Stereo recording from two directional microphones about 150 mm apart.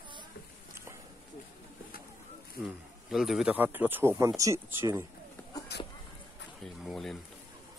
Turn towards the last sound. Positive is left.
turn(degrees=0)  # may be behind; listen again after turning